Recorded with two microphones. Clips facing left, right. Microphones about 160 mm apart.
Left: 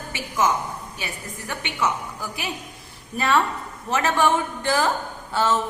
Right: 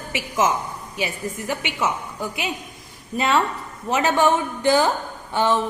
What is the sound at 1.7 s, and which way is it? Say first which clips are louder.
Speech: right 1 dB; 25° right (ahead or behind).